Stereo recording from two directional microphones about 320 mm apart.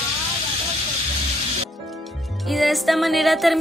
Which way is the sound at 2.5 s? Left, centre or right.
Centre.